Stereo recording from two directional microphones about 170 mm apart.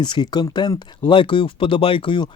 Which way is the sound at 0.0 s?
25° left (ahead or behind).